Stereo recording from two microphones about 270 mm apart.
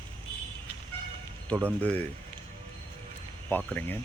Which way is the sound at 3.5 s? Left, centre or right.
Centre.